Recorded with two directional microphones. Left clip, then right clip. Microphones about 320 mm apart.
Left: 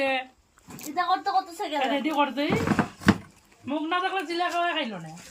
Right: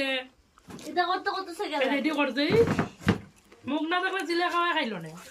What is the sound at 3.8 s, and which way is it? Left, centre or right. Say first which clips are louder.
Speech: left 1 dB; centre.